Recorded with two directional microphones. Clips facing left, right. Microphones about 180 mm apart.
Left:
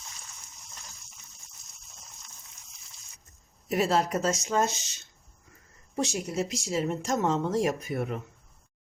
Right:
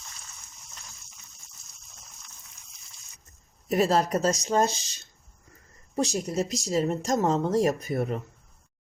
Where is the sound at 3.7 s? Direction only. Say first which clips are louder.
Right 3 dB; 40° right (ahead or behind).